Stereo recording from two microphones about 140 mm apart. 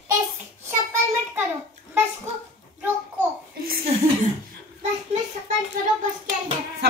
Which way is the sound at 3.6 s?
90° right.